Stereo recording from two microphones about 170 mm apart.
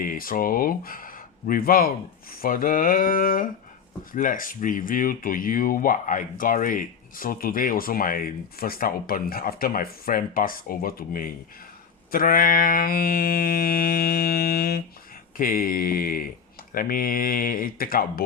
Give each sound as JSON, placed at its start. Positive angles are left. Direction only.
{"t": 0.0, "sound": "speech", "side_deg": 55}